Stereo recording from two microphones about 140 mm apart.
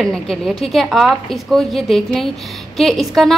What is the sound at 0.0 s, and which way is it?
A woman's voice, centre (ahead or behind).